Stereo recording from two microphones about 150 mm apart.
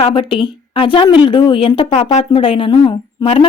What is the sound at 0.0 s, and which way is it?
A woman's voice, 35° left (ahead or behind).